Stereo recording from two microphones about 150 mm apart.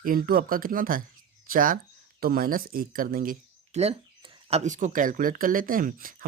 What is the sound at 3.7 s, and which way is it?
Speech, 45° right (ahead or behind).